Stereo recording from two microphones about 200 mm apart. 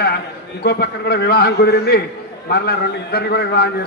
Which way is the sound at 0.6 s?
55° left (ahead or behind).